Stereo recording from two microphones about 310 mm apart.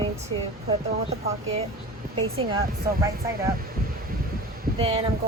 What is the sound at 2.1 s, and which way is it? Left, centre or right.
Speech, centre.